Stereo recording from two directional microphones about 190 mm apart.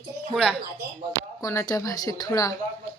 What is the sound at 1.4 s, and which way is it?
A man's voice, 15° left (ahead or behind).